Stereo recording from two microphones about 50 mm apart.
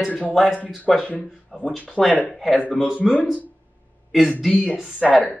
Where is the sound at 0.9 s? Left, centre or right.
Centre.